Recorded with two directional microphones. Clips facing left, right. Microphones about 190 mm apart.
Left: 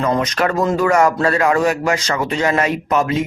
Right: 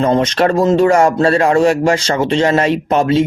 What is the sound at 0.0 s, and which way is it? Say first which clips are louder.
A man's voice: right 5 dB; 30° right (ahead or behind).